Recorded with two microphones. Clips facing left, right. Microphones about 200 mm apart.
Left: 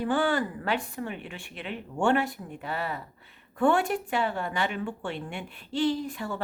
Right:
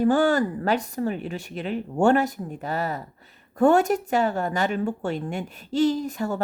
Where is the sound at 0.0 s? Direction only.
45° right (ahead or behind).